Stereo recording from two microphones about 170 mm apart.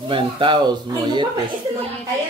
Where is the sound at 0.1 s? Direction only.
30° right (ahead or behind).